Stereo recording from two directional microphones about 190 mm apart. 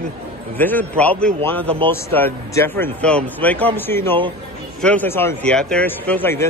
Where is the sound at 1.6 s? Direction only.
30° right (ahead or behind).